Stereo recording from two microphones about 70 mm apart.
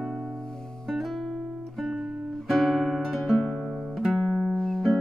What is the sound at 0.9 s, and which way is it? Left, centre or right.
Music, centre.